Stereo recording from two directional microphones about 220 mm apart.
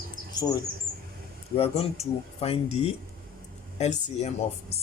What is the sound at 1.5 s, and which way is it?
Speech, 25° left (ahead or behind).